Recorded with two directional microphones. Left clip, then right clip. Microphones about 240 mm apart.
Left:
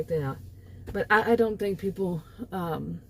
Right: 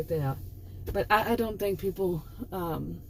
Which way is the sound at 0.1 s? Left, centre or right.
Left.